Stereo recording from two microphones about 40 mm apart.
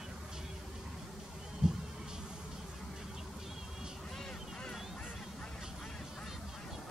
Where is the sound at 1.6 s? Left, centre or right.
Right.